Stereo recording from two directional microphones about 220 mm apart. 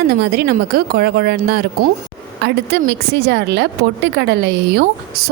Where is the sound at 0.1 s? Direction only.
45° right (ahead or behind).